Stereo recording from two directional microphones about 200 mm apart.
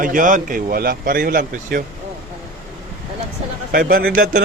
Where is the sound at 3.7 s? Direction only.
50° right (ahead or behind).